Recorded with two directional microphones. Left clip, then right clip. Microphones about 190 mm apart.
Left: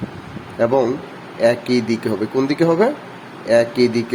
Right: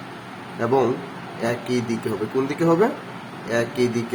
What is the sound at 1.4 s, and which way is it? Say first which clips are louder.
Speech: left 9 dB; 30° left (ahead or behind).